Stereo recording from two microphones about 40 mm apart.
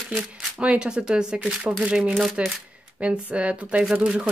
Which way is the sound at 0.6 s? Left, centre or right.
Right.